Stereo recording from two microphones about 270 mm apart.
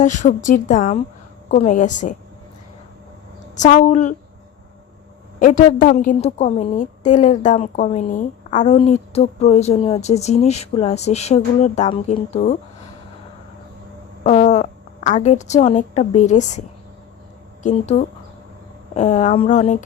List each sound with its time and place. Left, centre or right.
0.0 s a woman's voice: left
3.5 s a woman's voice: left
5.4 s a woman's voice: left
14.3 s a woman's voice: left